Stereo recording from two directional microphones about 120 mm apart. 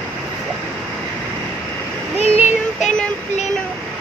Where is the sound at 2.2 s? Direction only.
65° left (ahead or behind).